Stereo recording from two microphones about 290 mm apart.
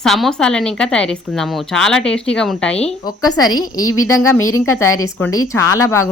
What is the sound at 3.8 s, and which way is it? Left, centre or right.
Speech, left.